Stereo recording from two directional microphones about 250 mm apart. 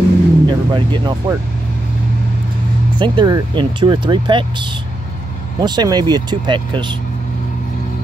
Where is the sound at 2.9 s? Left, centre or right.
Centre.